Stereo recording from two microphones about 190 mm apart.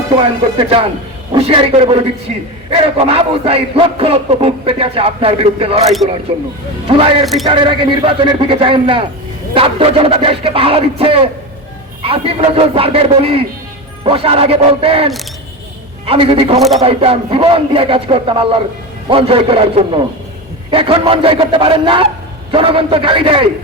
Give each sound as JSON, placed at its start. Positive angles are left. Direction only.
{"t": 0.5, "sound": "a man's voice", "side_deg": -25}